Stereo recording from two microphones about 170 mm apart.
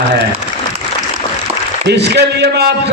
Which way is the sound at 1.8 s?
80° right.